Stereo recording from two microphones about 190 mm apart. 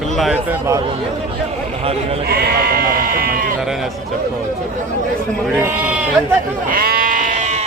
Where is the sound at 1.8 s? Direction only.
30° right (ahead or behind).